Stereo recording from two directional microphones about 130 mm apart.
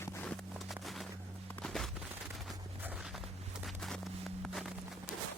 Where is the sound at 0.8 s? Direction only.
Centre (ahead or behind).